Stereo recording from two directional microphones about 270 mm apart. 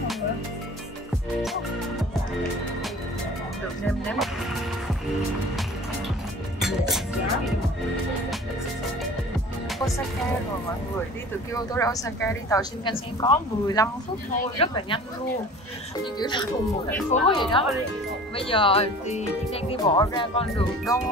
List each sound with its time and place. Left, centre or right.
6.6 s music: centre
11.5 s a woman's voice: centre
16.2 s a woman's voice: centre